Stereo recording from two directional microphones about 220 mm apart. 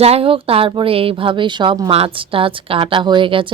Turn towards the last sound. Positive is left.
turn(degrees=-25)  # may be behind; listen again after turning